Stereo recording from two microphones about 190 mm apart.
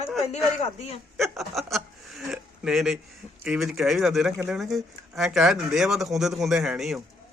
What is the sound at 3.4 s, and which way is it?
Speech, centre (ahead or behind).